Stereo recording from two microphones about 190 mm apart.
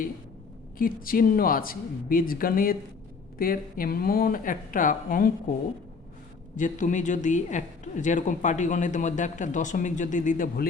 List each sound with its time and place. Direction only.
0.8 s speech: 50° left (ahead or behind)
6.6 s speech: 40° left (ahead or behind)